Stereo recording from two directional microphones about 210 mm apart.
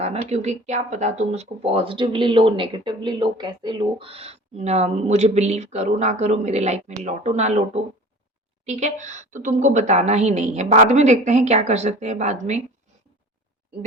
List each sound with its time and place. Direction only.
0.0 s speech: 30° right (ahead or behind)
8.6 s speech: 35° right (ahead or behind)